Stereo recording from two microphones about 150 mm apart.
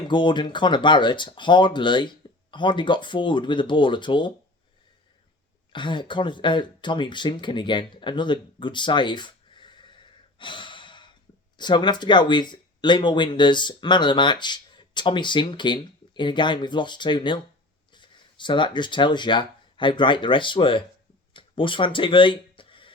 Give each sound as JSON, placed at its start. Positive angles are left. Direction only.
{"t": 0.1, "sound": "speech", "side_deg": 30}
{"t": 5.7, "sound": "speech", "side_deg": 30}
{"t": 21.3, "sound": "a sound", "side_deg": 35}